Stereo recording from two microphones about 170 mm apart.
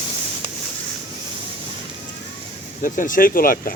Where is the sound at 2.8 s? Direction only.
50° left (ahead or behind).